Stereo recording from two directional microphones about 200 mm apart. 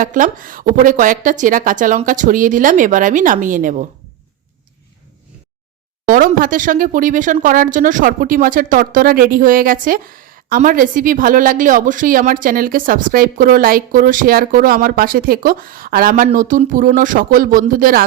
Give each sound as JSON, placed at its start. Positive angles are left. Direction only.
{"t": 0.0, "sound": "speech", "side_deg": -40}
{"t": 6.1, "sound": "speech", "side_deg": -45}